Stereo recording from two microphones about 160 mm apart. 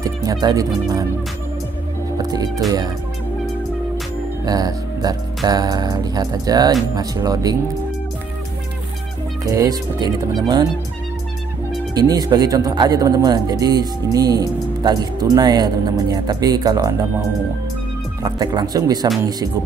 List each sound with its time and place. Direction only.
0.0 s speech: 20° right (ahead or behind)
2.1 s speech: 25° right (ahead or behind)
4.5 s speech: 25° right (ahead or behind)
9.4 s speech: 20° right (ahead or behind)
11.9 s speech: 25° right (ahead or behind)
18.2 s speech: 25° right (ahead or behind)